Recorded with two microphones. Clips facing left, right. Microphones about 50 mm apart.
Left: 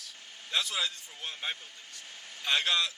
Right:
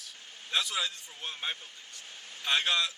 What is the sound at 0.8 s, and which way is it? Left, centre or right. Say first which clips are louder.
Speech: even; right.